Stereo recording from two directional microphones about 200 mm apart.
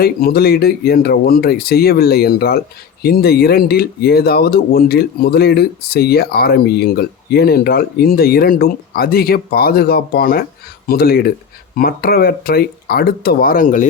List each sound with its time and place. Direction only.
0.0 s speech: 50° left (ahead or behind)